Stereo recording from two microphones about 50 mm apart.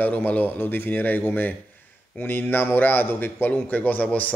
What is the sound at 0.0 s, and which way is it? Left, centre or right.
A man's voice, left.